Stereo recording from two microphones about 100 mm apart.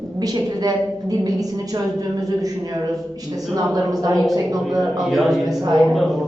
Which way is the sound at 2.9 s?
Centre (ahead or behind).